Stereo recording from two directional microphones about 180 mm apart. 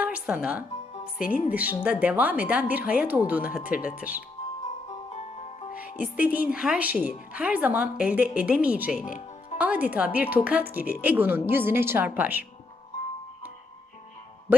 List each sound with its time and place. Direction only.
0.0 s music: 5° right (ahead or behind)
1.2 s music: 50° left (ahead or behind)
1.5 s speech: 10° right (ahead or behind)
4.9 s music: 35° left (ahead or behind)
6.0 s speech: 10° right (ahead or behind)
9.0 s music: 50° left (ahead or behind)
9.6 s speech: 10° right (ahead or behind)